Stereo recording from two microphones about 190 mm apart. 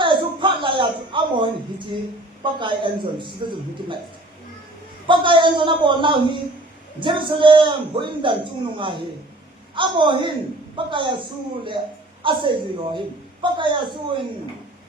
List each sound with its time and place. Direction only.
0.0 s a sound: 25° right (ahead or behind)
2.4 s a woman's voice: 25° right (ahead or behind)
5.0 s a woman's voice: 25° right (ahead or behind)